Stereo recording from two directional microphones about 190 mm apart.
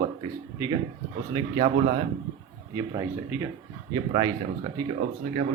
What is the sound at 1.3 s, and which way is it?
Speech, 25° right (ahead or behind).